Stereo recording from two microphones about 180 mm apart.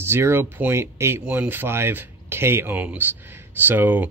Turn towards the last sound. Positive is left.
turn(degrees=-10)  # may be behind; listen again after turning